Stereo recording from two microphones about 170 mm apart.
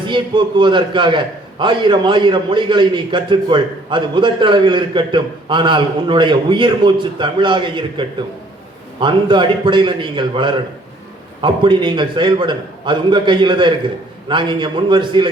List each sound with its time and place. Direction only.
0.1 s a man's voice: 30° right (ahead or behind)